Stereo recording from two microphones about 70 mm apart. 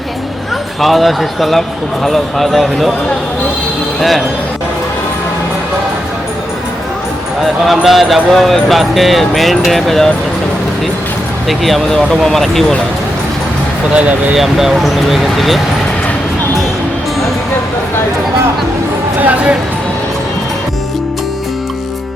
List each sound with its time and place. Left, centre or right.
0.8 s speech: centre
7.4 s speech: centre
11.4 s speech: centre
13.9 s speech: centre
14.3 s speech: centre
19.2 s speech: right